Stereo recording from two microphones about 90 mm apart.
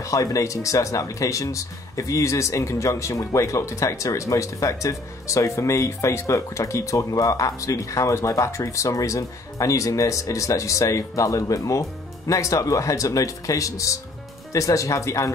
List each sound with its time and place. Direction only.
0.0 s speech: 40° left (ahead or behind)